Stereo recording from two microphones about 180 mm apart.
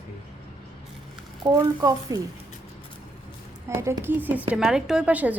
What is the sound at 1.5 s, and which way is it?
Speech, 25° right (ahead or behind).